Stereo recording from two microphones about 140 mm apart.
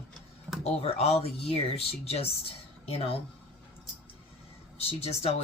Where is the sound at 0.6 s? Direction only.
45° left (ahead or behind).